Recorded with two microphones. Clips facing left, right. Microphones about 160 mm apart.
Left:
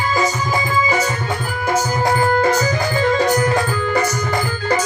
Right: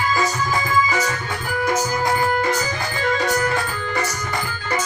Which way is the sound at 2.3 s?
45° left (ahead or behind).